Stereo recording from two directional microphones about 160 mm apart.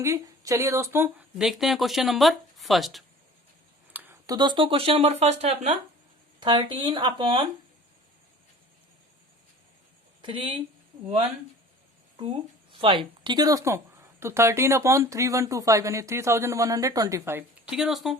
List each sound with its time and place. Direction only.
0.0 s speech: 20° right (ahead or behind)
1.4 s speech: 5° right (ahead or behind)
3.9 s a sound: 10° right (ahead or behind)
4.3 s speech: 30° right (ahead or behind)
6.4 s speech: 30° right (ahead or behind)
10.2 s speech: 30° right (ahead or behind)
12.8 s speech: 35° right (ahead or behind); by 17.4 s 15° right (ahead or behind)
17.7 s speech: 5° right (ahead or behind)